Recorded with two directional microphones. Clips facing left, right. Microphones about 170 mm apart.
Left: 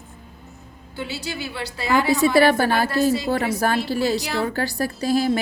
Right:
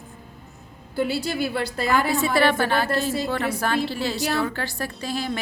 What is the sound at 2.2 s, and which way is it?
A woman's voice, 40° left (ahead or behind).